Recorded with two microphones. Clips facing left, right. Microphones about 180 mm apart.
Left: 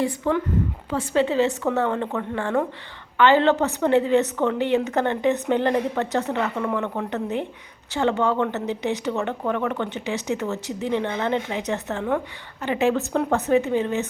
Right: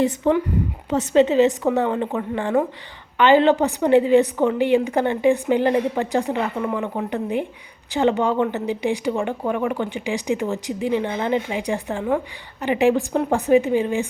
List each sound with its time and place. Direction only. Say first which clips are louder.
0.0 s a woman's voice: right 4 dB; 20° right (ahead or behind)